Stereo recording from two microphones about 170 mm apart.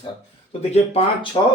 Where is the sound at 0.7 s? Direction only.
35° left (ahead or behind).